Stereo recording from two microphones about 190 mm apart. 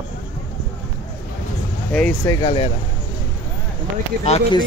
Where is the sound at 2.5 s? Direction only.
30° left (ahead or behind).